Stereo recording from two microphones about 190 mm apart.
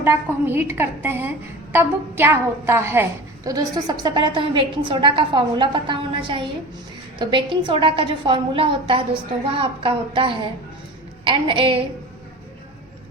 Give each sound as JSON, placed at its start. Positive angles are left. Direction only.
{"t": 0.0, "sound": "a woman's voice", "side_deg": -10}